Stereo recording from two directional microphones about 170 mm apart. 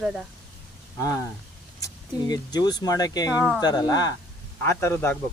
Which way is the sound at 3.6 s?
25° left (ahead or behind).